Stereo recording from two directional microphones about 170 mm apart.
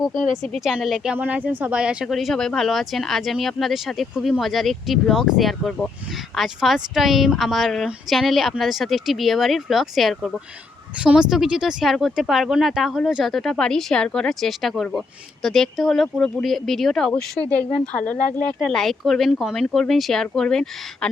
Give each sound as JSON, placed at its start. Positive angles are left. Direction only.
{"t": 0.5, "sound": "speech", "side_deg": 0}